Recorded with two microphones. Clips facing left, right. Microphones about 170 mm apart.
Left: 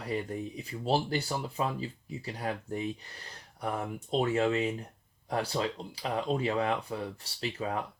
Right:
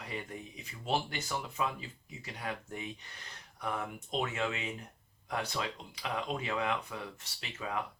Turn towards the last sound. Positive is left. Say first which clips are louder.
# left 5 dB
turn(degrees=35)  # may be behind; listen again after turning